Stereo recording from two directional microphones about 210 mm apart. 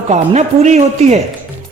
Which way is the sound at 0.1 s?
35° right (ahead or behind).